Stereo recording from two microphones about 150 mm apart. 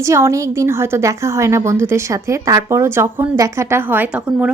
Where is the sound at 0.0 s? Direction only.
20° right (ahead or behind).